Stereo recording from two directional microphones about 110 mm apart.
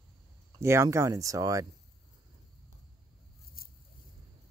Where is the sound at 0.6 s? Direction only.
25° right (ahead or behind).